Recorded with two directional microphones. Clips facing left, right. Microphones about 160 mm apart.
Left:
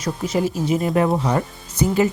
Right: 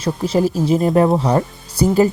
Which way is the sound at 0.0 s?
35° right (ahead or behind).